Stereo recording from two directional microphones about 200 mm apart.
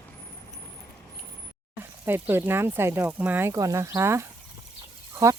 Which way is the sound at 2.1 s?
10° right (ahead or behind).